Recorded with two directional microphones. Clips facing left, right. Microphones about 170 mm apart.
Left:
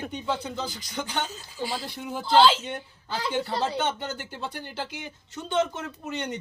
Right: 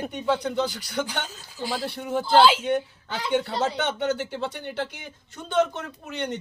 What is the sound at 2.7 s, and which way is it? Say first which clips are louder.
Speech: right 6 dB; 70° right (ahead or behind).